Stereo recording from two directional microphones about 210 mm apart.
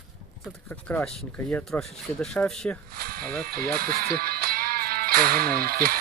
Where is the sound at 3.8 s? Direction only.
45° right (ahead or behind).